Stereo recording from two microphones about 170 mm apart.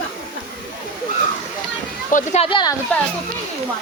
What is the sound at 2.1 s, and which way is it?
Speech, 50° left (ahead or behind).